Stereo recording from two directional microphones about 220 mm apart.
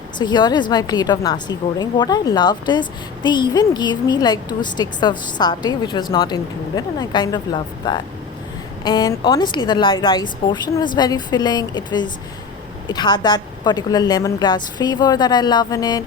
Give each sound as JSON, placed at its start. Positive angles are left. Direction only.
{"t": 0.2, "sound": "a woman's voice", "side_deg": 20}